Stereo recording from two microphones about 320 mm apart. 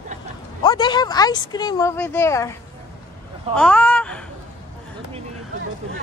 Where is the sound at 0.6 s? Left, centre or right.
Centre.